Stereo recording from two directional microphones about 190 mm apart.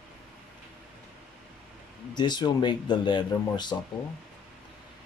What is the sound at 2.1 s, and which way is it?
Speech, 20° left (ahead or behind).